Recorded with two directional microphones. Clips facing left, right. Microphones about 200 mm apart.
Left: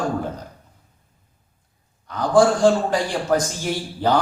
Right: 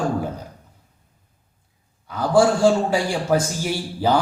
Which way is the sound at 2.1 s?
5° right (ahead or behind).